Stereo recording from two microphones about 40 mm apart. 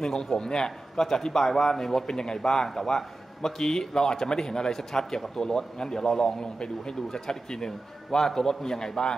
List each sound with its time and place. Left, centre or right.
0.0 s a man's voice: centre